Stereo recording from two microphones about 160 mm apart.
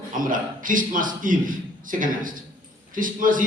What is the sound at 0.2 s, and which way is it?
A man's voice, 55° right (ahead or behind).